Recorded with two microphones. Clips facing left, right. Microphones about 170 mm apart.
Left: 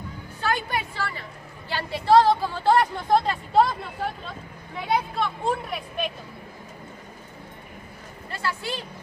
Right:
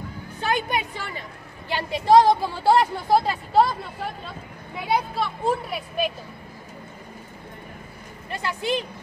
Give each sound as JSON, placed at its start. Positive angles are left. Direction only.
{"t": 0.4, "sound": "a woman's voice", "side_deg": -20}
{"t": 8.3, "sound": "speech", "side_deg": -20}